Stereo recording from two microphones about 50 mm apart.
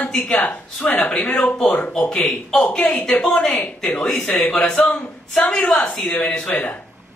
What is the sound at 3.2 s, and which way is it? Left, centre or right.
A woman's voice, centre.